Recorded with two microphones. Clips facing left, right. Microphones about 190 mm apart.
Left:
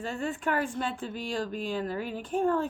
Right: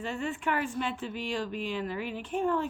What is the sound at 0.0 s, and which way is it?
A woman's voice, 45° left (ahead or behind).